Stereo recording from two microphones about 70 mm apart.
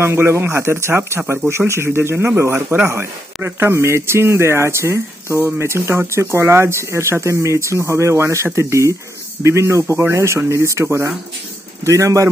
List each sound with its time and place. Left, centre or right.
0.0 s speech: right